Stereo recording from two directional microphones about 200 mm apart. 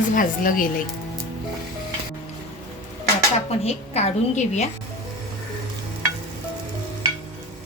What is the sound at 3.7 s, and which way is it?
A woman's voice, 30° left (ahead or behind).